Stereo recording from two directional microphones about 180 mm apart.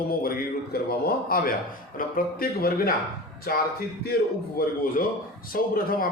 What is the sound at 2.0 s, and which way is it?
A man's voice, 55° left (ahead or behind).